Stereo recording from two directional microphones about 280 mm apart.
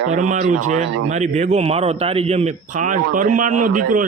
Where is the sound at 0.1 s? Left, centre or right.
Right.